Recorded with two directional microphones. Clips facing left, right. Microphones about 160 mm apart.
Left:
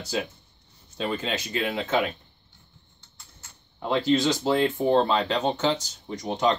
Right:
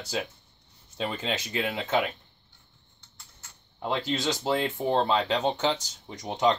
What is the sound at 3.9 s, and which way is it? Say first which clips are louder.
Speech: left 6 dB; 15° right (ahead or behind).